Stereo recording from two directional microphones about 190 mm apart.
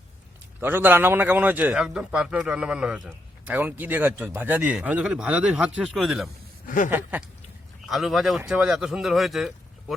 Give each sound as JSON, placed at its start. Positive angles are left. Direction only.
{"t": 0.6, "sound": "a man's voice", "side_deg": -10}
{"t": 6.7, "sound": "speech", "side_deg": 45}
{"t": 6.9, "sound": "a man's voice", "side_deg": -10}